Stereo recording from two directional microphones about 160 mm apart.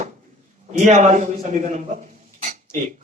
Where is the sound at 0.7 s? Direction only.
45° right (ahead or behind).